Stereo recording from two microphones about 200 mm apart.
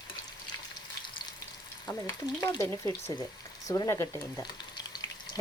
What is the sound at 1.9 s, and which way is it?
Frying, 20° left (ahead or behind).